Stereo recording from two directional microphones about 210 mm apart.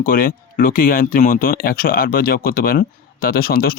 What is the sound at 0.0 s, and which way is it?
Speech, 40° left (ahead or behind).